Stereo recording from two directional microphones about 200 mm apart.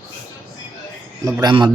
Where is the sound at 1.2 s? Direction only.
20° right (ahead or behind).